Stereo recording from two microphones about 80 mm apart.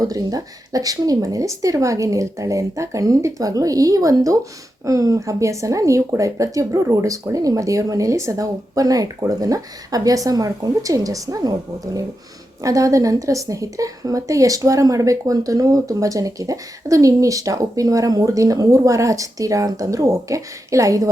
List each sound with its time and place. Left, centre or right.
0.0 s a woman's voice: right
12.6 s a woman's voice: right